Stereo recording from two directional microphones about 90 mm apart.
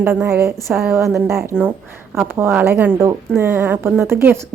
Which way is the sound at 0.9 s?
30° right (ahead or behind).